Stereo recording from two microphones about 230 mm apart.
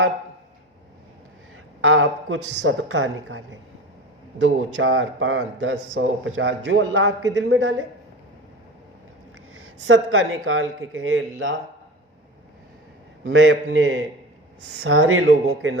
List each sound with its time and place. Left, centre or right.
1.8 s a man's voice: right
9.8 s a man's voice: right
13.2 s a man's voice: right